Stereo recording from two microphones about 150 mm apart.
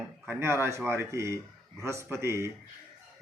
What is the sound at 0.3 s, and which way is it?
A man's voice, 15° right (ahead or behind).